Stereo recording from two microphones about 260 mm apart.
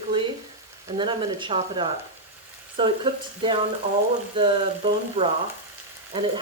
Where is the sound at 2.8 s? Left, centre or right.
Centre.